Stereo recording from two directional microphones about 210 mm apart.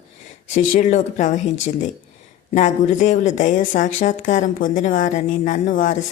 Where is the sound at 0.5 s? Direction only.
35° left (ahead or behind).